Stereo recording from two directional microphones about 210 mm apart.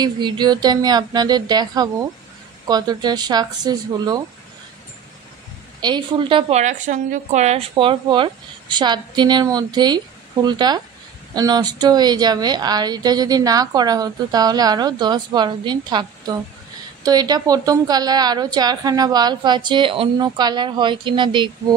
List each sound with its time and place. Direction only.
0.0 s a woman's voice: 20° right (ahead or behind)
5.8 s a woman's voice: 20° right (ahead or behind)